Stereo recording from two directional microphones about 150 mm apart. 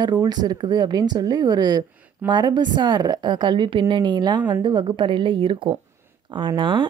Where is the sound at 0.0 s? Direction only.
25° right (ahead or behind).